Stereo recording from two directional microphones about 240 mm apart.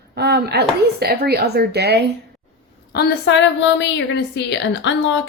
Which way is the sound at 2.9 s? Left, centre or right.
Left.